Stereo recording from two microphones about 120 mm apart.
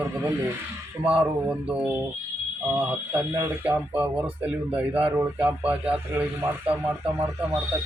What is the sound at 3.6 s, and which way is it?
Speech, 15° right (ahead or behind).